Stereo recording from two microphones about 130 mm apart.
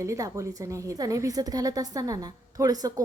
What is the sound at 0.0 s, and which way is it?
A woman's voice, 25° right (ahead or behind).